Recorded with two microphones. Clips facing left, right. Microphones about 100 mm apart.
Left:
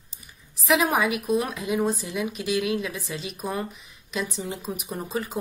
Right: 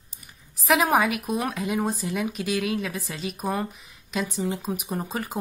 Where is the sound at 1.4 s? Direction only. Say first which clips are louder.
Left 1 dB; 35° right (ahead or behind).